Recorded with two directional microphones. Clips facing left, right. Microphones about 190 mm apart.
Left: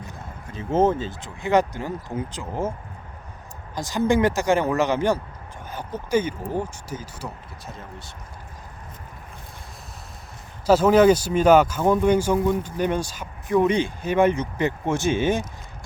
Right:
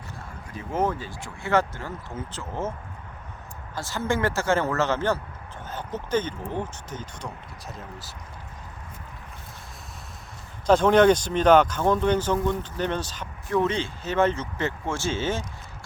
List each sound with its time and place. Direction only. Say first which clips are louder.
0.5 s speech: left 6 dB; 25° left (ahead or behind)
3.8 s speech: left 6 dB; 15° left (ahead or behind); by 8.1 s centre (ahead or behind)
10.7 s speech: left 2 dB; 5° left (ahead or behind)